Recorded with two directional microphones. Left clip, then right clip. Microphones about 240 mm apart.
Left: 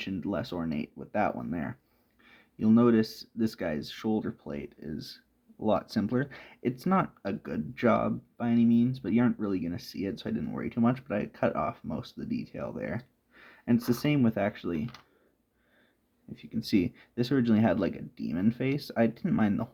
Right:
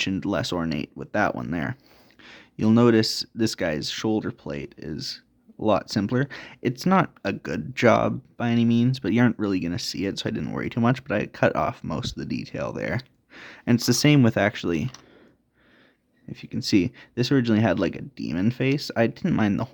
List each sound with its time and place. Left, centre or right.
0.0 s speech: right
16.3 s speech: right